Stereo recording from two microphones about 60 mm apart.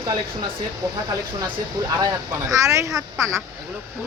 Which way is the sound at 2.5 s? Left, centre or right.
Right.